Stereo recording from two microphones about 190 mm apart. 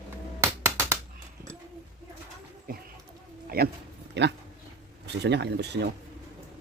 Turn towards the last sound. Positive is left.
turn(degrees=-60)  # may be behind; listen again after turning